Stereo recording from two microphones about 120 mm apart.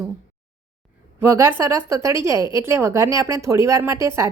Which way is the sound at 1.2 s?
20° right (ahead or behind).